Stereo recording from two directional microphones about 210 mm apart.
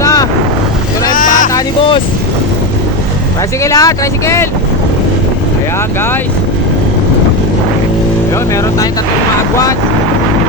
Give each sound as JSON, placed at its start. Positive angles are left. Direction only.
{"t": 0.0, "sound": "boat", "side_deg": 15}
{"t": 1.1, "sound": "vehicle", "side_deg": 40}
{"t": 1.5, "sound": "vehicle", "side_deg": 25}
{"t": 3.6, "sound": "speech", "side_deg": 15}